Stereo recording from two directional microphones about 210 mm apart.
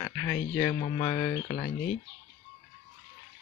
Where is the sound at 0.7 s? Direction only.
35° left (ahead or behind).